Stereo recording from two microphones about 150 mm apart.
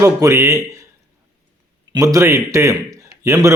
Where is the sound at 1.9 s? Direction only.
20° right (ahead or behind).